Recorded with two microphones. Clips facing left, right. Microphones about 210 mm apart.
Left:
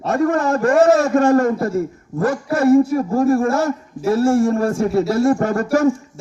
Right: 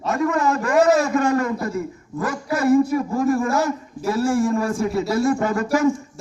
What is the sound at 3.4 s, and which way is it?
Speech, 25° left (ahead or behind).